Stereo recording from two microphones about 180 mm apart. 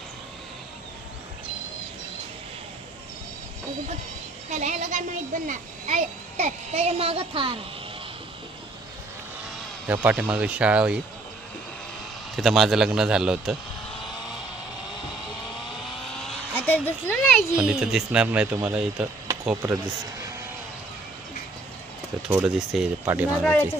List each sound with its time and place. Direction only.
4.5 s a child's voice: 45° right (ahead or behind)
9.8 s speech: 10° right (ahead or behind)
12.4 s a man's voice: centre (ahead or behind)
15.9 s vehicle: centre (ahead or behind)
17.6 s a man's voice: 5° right (ahead or behind)
22.3 s speech: 10° right (ahead or behind)
23.4 s a man's voice: 5° left (ahead or behind)